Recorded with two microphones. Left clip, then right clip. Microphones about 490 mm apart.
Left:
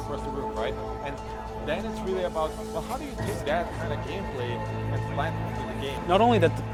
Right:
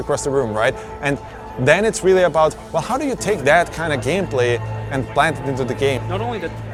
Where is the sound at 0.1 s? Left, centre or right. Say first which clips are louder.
Right 14 dB; right.